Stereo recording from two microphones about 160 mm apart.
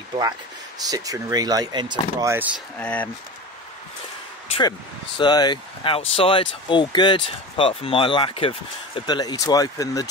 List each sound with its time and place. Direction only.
0.8 s speech: 20° right (ahead or behind)
2.8 s speech: 10° left (ahead or behind)
4.5 s speech: 30° left (ahead or behind)